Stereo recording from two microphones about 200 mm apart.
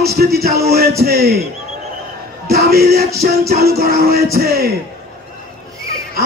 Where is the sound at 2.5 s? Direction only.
50° right (ahead or behind).